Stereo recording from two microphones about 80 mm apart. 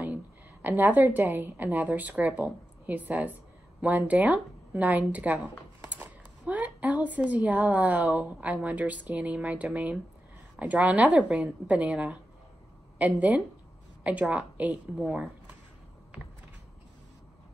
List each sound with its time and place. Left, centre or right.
0.0 s a woman's voice: centre